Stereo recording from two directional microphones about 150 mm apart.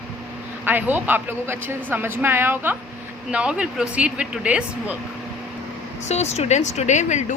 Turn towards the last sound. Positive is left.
turn(degrees=55)  # may be behind; listen again after turning